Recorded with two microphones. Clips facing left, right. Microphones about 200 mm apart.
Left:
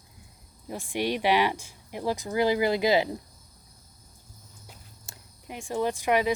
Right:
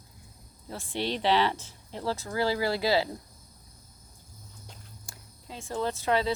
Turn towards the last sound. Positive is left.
turn(degrees=15)  # may be behind; listen again after turning